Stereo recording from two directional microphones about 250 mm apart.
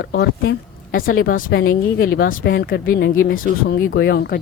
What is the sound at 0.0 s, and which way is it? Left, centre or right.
Speech, left.